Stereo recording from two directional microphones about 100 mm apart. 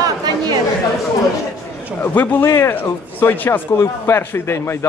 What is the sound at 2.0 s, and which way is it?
Speech, 20° left (ahead or behind).